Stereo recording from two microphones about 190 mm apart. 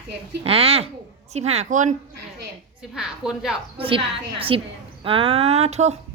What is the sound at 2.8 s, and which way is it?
Speech, 5° right (ahead or behind).